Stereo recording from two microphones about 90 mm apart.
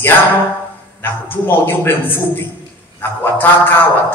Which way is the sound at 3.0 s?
25° left (ahead or behind).